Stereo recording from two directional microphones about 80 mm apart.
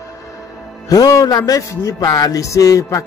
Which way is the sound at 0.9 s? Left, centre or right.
Left.